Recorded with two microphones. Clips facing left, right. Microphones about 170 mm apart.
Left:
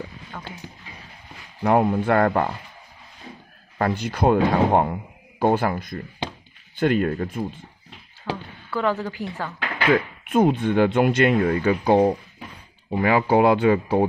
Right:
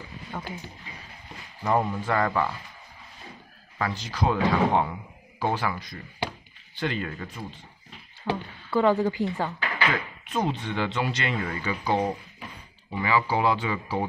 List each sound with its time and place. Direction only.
0.3 s speech: 10° right (ahead or behind)
1.6 s speech: 65° left (ahead or behind)
3.7 s speech: 55° left (ahead or behind)
8.3 s speech: 15° right (ahead or behind)
9.8 s speech: 55° left (ahead or behind)